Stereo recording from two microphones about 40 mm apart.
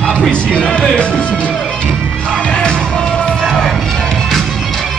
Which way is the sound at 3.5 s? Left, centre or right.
Centre.